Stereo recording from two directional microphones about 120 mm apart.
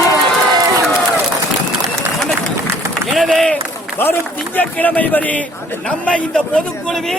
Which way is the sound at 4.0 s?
20° left (ahead or behind).